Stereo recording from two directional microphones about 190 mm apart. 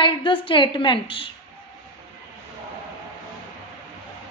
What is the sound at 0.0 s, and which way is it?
A woman's voice, 25° left (ahead or behind).